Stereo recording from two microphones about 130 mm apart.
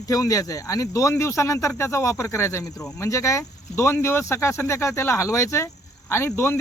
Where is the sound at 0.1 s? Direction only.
25° left (ahead or behind).